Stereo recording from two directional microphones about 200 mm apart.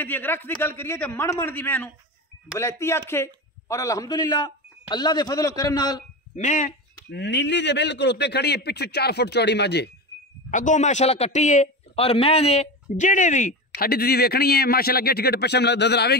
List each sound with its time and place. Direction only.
0.0 s a man's voice: 10° left (ahead or behind)
6.3 s a sound: 40° left (ahead or behind)
7.2 s a man's voice: 60° left (ahead or behind)
10.5 s a man's voice: 40° left (ahead or behind)
13.7 s a man's voice: 50° left (ahead or behind)